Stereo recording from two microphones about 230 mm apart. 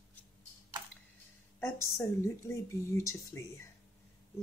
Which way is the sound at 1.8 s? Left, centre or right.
Centre.